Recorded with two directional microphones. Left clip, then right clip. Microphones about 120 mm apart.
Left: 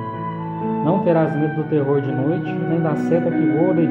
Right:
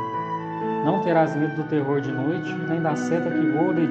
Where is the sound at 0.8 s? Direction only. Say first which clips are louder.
Left 3 dB; 30° right (ahead or behind).